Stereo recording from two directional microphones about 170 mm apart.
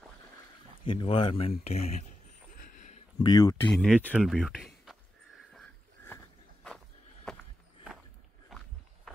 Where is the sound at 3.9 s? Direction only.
10° right (ahead or behind).